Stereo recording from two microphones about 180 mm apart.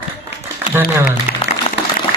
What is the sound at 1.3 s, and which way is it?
Applause, 50° left (ahead or behind).